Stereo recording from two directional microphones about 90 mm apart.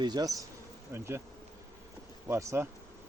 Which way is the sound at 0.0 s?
50° right (ahead or behind).